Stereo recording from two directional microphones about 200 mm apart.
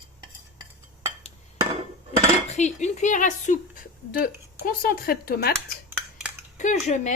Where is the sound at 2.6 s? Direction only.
35° left (ahead or behind).